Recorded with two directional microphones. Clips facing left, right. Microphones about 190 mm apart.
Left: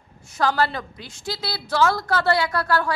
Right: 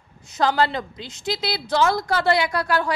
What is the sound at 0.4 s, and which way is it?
A woman's voice, 20° right (ahead or behind).